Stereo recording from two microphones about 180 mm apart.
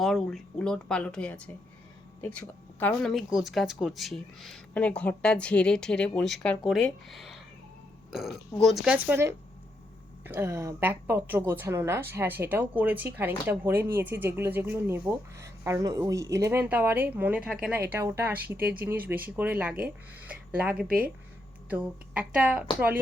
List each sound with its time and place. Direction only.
0.0 s a woman's voice: centre (ahead or behind)
20.8 s speech: 55° right (ahead or behind)
21.7 s a woman's voice: 5° right (ahead or behind)